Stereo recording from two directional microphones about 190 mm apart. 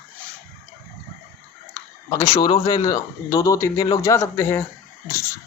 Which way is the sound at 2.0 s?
20° left (ahead or behind).